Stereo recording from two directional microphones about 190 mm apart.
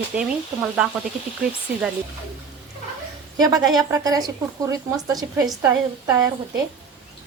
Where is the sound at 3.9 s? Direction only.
20° right (ahead or behind).